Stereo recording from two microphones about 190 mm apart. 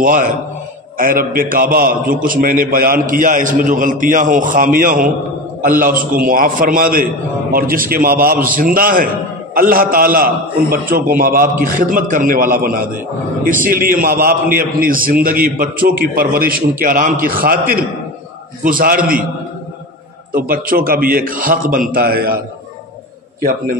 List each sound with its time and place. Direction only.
0.0 s a man's voice: 45° right (ahead or behind)
20.3 s a man's voice: 50° right (ahead or behind)